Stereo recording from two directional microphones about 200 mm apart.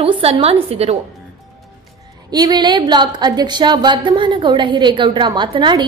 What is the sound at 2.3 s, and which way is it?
A woman's voice, 20° right (ahead or behind).